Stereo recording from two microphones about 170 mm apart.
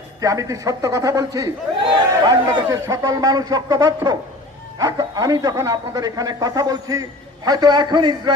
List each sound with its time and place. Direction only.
0.2 s a man's voice: 20° right (ahead or behind)